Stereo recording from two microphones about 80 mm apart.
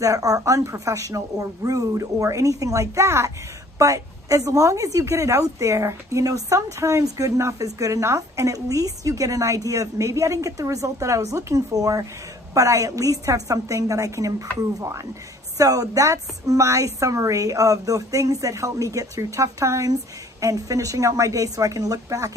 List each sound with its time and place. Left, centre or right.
0.0 s a woman's voice: right